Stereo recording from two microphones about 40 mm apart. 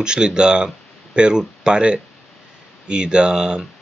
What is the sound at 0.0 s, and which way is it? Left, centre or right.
Speech, right.